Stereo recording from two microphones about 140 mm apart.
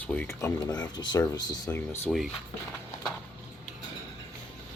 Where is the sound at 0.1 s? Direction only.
15° left (ahead or behind).